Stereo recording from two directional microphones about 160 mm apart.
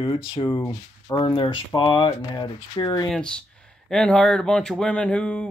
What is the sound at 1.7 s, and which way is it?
Speech, 30° left (ahead or behind).